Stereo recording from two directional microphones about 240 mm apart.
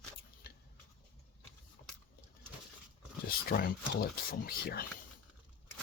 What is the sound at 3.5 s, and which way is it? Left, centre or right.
Speech, left.